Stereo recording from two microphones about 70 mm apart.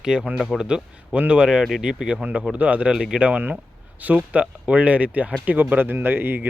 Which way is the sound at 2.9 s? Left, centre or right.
Centre.